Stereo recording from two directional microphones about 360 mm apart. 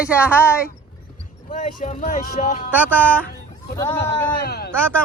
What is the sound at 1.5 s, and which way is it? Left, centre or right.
Speech, centre.